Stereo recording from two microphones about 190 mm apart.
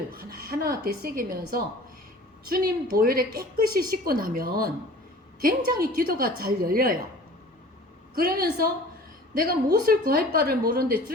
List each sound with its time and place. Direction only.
0.1 s speech: 50° right (ahead or behind)
8.1 s speech: 50° right (ahead or behind)